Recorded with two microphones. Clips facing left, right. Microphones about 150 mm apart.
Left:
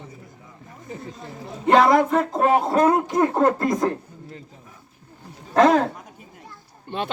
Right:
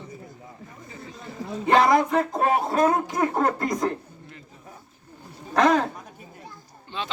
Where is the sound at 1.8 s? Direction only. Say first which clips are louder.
Left 2 dB; 50° left (ahead or behind).